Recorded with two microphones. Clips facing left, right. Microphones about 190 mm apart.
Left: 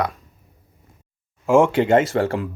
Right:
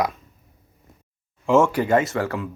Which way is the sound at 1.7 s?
25° left (ahead or behind).